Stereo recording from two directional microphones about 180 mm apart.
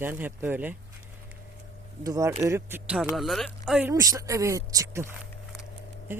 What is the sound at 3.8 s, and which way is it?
Speech, 20° right (ahead or behind).